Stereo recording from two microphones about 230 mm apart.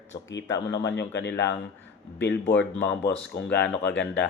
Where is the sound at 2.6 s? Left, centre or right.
Left.